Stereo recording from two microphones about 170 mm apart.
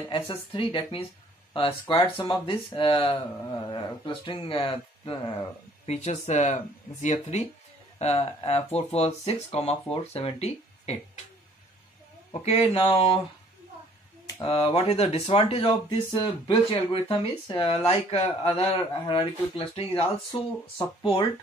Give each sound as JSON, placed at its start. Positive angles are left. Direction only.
{"t": 0.1, "sound": "speech", "side_deg": 30}
{"t": 5.9, "sound": "speech", "side_deg": 40}
{"t": 12.3, "sound": "speech", "side_deg": 35}
{"t": 14.2, "sound": "speech", "side_deg": 30}